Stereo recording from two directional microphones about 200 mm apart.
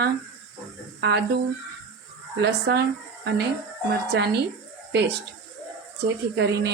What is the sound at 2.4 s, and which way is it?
Speech, 55° right (ahead or behind).